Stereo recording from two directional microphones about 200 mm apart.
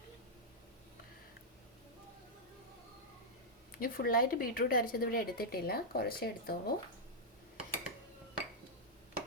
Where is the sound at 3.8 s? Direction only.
45° left (ahead or behind).